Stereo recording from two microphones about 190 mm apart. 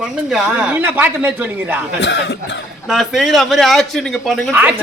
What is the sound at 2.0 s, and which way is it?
Speech, 65° left (ahead or behind).